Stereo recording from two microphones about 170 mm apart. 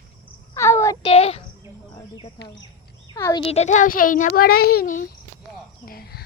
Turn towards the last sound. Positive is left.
turn(degrees=65)  # may be behind; listen again after turning